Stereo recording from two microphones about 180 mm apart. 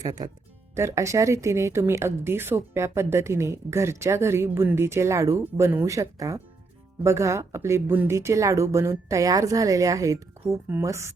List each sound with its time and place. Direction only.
0.0 s speech: 20° right (ahead or behind)